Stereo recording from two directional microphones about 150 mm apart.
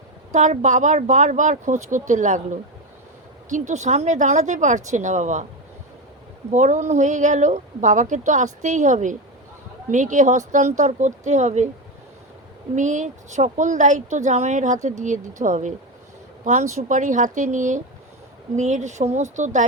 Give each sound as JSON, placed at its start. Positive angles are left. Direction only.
{"t": 0.3, "sound": "speech", "side_deg": -55}
{"t": 6.5, "sound": "speech", "side_deg": -55}
{"t": 12.7, "sound": "speech", "side_deg": -55}